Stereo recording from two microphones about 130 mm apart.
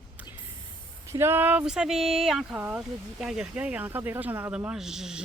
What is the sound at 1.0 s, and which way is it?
Speech, 20° right (ahead or behind).